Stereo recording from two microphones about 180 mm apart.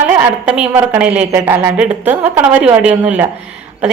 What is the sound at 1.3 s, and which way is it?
A woman's voice, 15° right (ahead or behind).